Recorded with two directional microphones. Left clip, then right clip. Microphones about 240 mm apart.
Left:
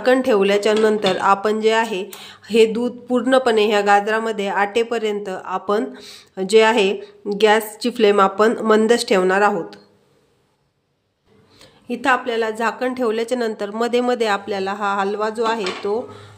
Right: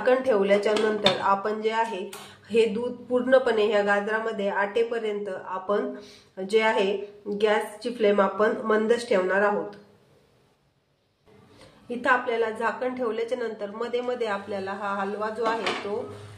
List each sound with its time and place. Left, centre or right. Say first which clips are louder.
0.0 s speech: left 6 dB; left
11.9 s speech: left 5 dB; left